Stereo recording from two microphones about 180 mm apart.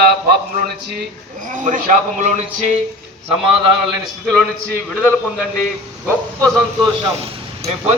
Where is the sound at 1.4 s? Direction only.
45° right (ahead or behind).